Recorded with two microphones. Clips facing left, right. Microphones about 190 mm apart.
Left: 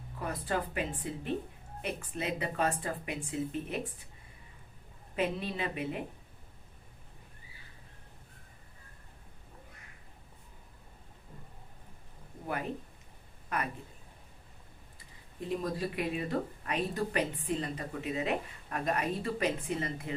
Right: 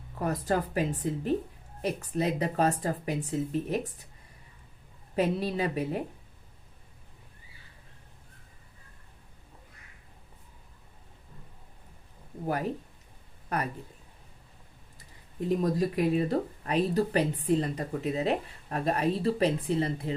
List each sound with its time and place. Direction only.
0.2 s speech: 40° right (ahead or behind)
5.1 s speech: 40° right (ahead or behind)
13.5 s speech: 35° right (ahead or behind)
15.4 s speech: 40° right (ahead or behind)